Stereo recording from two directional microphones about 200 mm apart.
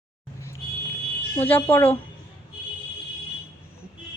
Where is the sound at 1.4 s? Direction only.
10° left (ahead or behind).